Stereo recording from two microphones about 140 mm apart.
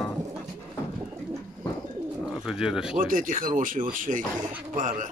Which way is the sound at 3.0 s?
75° right (ahead or behind).